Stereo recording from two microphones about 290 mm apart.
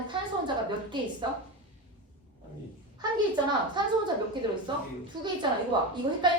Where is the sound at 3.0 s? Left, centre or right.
Centre.